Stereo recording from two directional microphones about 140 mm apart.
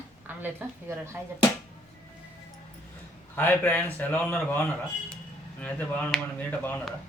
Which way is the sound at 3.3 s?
15° left (ahead or behind).